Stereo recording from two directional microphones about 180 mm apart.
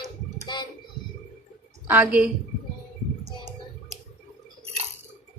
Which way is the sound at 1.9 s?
10° right (ahead or behind).